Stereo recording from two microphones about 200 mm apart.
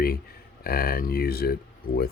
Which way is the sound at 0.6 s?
50° left (ahead or behind).